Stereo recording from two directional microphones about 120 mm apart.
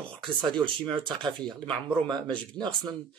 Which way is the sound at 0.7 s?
45° right (ahead or behind).